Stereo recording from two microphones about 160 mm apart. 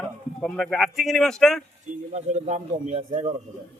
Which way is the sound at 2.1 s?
45° right (ahead or behind).